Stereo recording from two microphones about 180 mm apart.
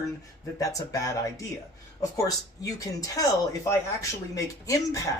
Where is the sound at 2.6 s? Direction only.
20° left (ahead or behind).